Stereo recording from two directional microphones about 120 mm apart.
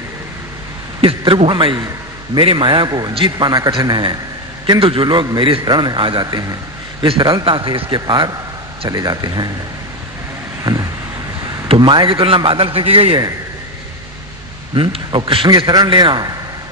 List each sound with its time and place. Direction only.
1.0 s a man's voice: 45° right (ahead or behind)
10.6 s vehicle: 30° right (ahead or behind)
11.6 s a man's voice: 50° right (ahead or behind)
14.8 s a man's voice: 45° right (ahead or behind)